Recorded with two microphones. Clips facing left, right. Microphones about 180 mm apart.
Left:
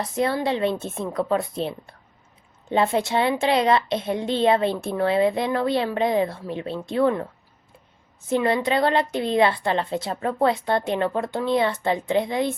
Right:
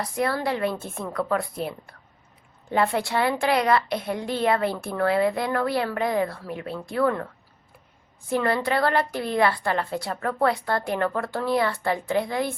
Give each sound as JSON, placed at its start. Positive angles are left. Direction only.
{"t": 0.0, "sound": "a woman's voice", "side_deg": 25}
{"t": 8.3, "sound": "a woman's voice", "side_deg": 20}